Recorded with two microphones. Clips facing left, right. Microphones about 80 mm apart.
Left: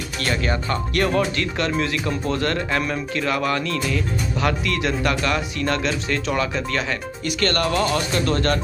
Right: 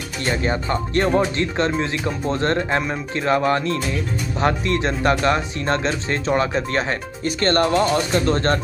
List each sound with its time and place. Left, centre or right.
0.2 s speech: right